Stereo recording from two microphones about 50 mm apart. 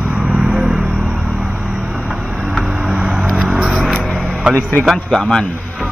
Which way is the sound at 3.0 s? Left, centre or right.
Centre.